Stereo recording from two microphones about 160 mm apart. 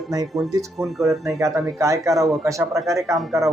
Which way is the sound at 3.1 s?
Centre (ahead or behind).